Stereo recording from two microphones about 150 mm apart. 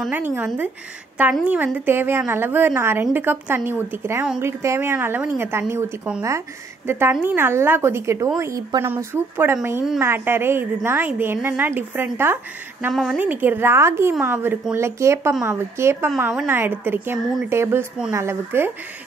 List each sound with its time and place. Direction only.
0.1 s a woman's voice: 15° right (ahead or behind)
12.9 s a woman's voice: centre (ahead or behind)
13.2 s a woman's voice: 10° right (ahead or behind)